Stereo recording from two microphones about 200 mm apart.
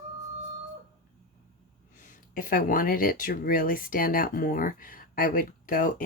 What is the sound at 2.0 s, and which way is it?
Speech, 40° left (ahead or behind).